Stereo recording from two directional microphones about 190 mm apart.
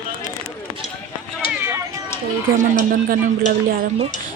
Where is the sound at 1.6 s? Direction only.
15° right (ahead or behind).